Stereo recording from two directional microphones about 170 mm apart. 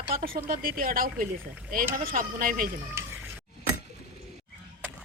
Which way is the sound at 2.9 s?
15° right (ahead or behind).